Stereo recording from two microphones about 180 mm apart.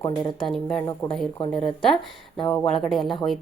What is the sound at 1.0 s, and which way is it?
Speech, 15° left (ahead or behind).